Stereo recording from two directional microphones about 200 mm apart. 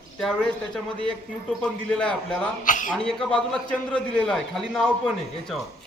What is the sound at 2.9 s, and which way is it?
A man's voice, 5° left (ahead or behind).